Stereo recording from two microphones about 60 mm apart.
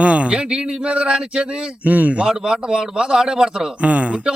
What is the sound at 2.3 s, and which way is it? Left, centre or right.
A man's voice, centre.